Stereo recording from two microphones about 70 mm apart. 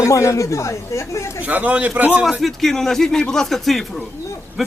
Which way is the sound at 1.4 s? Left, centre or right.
Right.